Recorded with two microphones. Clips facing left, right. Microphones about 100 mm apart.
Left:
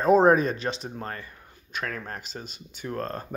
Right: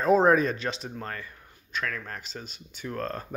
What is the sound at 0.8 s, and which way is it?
Speech, 25° left (ahead or behind).